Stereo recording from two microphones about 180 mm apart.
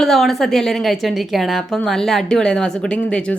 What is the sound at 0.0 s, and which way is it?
A woman's voice, centre (ahead or behind).